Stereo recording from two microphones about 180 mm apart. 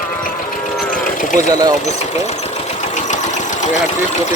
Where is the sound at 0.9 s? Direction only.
45° left (ahead or behind).